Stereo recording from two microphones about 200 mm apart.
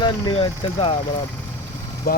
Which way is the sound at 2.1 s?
50° left (ahead or behind).